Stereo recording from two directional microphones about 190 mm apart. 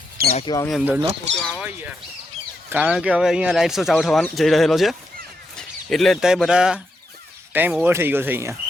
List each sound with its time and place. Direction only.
0.2 s speech: 50° right (ahead or behind)
0.7 s speech: 5° right (ahead or behind)
2.6 s speech: 5° right (ahead or behind)